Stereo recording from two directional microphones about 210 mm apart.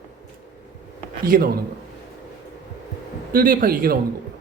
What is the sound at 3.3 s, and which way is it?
Speech, 40° right (ahead or behind).